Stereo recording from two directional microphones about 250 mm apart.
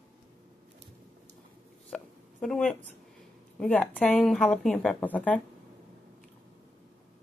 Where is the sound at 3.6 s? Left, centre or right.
Centre.